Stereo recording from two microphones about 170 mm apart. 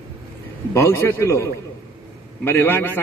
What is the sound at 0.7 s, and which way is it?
A man's voice, 15° left (ahead or behind).